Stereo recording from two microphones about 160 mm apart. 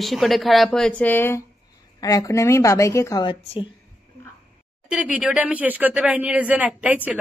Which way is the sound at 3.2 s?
30° left (ahead or behind).